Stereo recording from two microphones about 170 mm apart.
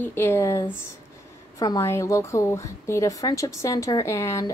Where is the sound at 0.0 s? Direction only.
15° left (ahead or behind).